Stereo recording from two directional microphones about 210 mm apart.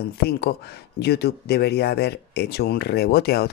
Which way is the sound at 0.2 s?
50° left (ahead or behind).